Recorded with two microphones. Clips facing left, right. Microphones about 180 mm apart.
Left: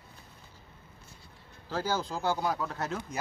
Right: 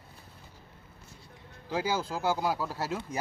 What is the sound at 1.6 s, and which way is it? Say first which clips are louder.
Speech: right 1 dB; 10° right (ahead or behind).